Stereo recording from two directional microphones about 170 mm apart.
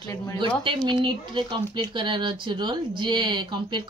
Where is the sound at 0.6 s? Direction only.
30° right (ahead or behind).